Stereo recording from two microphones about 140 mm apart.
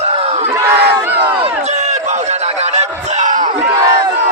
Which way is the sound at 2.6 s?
55° right (ahead or behind).